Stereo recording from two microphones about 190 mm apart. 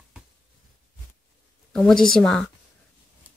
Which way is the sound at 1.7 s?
5° left (ahead or behind).